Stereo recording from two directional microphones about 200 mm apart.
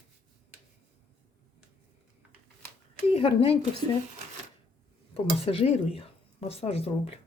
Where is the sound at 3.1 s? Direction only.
30° left (ahead or behind).